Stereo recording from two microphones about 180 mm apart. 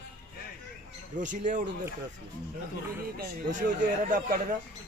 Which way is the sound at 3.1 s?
50° right (ahead or behind).